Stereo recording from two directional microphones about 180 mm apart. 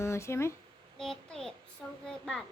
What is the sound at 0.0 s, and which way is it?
Speech, 15° left (ahead or behind).